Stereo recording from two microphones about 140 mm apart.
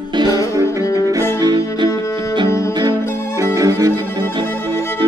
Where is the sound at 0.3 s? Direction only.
25° left (ahead or behind).